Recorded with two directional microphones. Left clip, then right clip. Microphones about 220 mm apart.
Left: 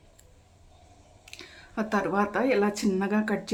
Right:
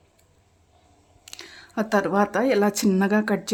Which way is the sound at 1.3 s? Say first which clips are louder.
Right 4 dB; 35° right (ahead or behind).